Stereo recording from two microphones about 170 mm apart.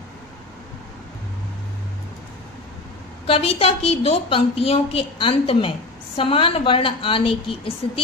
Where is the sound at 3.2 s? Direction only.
35° left (ahead or behind).